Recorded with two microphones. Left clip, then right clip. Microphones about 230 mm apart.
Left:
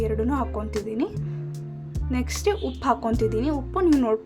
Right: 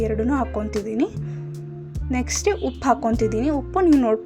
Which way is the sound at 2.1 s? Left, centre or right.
Centre.